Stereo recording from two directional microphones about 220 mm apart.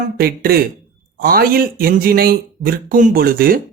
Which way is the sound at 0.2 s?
45° right (ahead or behind).